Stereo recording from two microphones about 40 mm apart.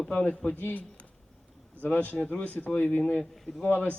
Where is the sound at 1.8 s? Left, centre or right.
Left.